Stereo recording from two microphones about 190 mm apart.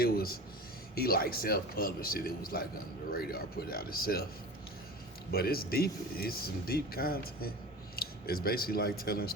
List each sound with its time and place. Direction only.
0.0 s a sound: 50° left (ahead or behind)
0.9 s speech: 50° left (ahead or behind)
5.3 s speech: 55° left (ahead or behind)